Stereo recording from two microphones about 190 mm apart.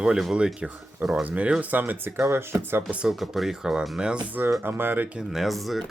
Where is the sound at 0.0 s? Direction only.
5° right (ahead or behind).